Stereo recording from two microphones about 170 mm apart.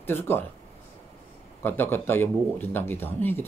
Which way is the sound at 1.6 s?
15° left (ahead or behind).